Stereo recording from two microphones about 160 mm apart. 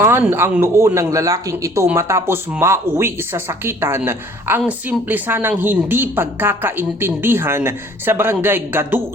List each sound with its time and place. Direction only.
0.0 s speech: 15° right (ahead or behind)